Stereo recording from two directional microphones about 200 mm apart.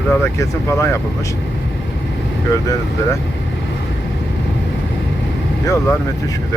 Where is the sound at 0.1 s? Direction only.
15° left (ahead or behind).